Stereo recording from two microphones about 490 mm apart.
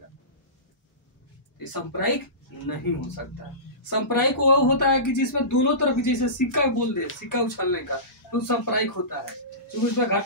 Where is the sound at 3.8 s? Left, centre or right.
Left.